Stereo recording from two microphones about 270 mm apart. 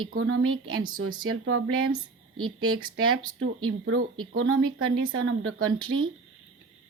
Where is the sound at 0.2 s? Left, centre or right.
Right.